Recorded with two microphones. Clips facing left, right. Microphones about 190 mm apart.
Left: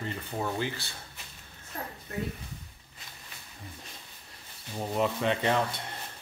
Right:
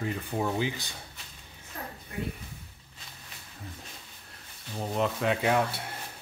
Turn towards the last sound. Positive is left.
turn(degrees=-5)  # may be behind; listen again after turning